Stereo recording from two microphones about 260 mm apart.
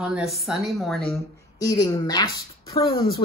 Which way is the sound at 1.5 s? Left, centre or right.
Centre.